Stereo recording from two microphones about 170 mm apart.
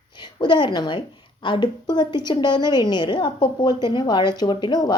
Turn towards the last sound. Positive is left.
turn(degrees=25)  # may be behind; listen again after turning